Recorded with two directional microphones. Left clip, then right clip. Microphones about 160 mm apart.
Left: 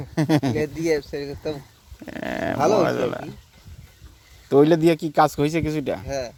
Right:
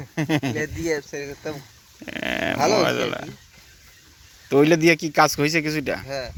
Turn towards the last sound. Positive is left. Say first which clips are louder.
# left 2 dB
turn(degrees=70)  # may be behind; listen again after turning